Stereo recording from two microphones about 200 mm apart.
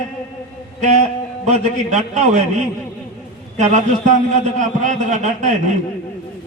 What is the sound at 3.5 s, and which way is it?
A man's voice, 35° right (ahead or behind).